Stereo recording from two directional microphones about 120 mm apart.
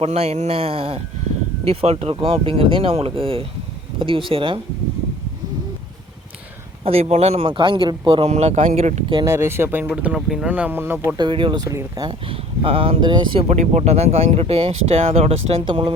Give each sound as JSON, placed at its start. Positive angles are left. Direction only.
{"t": 0.0, "sound": "speech", "side_deg": -60}
{"t": 6.8, "sound": "speech", "side_deg": -60}
{"t": 8.3, "sound": "speech", "side_deg": -70}
{"t": 9.2, "sound": "speech", "side_deg": -20}
{"t": 10.5, "sound": "speech", "side_deg": -15}
{"t": 11.2, "sound": "speech", "side_deg": -45}
{"t": 11.6, "sound": "speech", "side_deg": -30}
{"t": 12.0, "sound": "speech", "side_deg": -50}
{"t": 13.5, "sound": "speech", "side_deg": -70}
{"t": 15.6, "sound": "speech", "side_deg": -45}